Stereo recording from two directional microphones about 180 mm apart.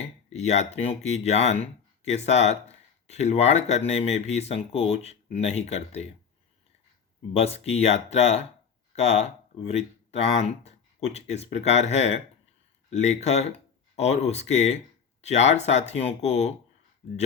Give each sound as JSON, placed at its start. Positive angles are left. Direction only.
{"t": 0.3, "sound": "speech", "side_deg": 40}
{"t": 7.3, "sound": "speech", "side_deg": 35}